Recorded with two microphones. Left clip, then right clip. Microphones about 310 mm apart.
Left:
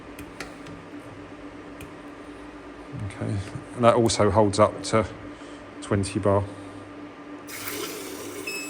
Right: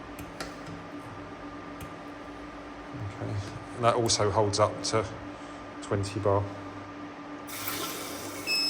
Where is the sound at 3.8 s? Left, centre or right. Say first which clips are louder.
Left 6 dB; left.